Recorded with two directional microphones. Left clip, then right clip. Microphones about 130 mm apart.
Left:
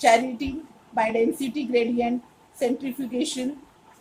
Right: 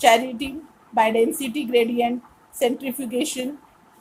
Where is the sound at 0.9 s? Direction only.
55° right (ahead or behind).